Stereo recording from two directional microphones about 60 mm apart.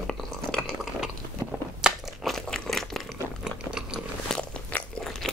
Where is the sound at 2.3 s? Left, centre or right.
Centre.